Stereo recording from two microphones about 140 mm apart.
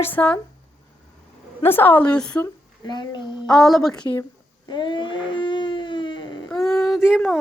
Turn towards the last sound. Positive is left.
turn(degrees=0)  # may be behind; listen again after turning